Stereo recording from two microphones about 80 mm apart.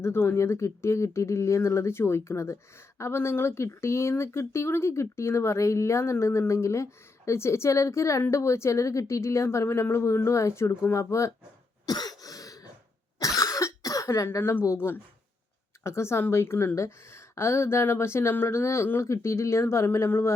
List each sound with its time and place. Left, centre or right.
0.0 s a woman's voice: left
11.9 s cough: left
15.8 s a woman's voice: left